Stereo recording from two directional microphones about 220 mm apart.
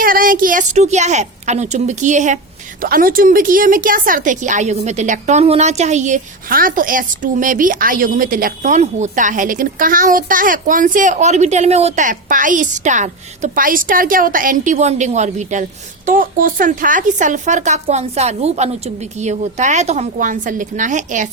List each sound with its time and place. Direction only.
0.0 s a woman's voice: 40° right (ahead or behind)